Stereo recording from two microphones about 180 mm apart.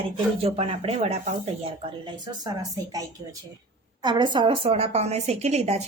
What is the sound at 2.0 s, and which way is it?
Speech, 20° right (ahead or behind).